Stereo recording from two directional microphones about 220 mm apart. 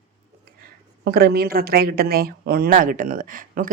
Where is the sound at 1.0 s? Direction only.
45° right (ahead or behind).